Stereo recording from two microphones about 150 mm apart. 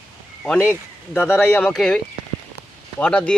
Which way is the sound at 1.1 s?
15° left (ahead or behind).